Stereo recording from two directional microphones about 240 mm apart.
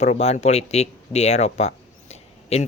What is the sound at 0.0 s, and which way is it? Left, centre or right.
Speech, left.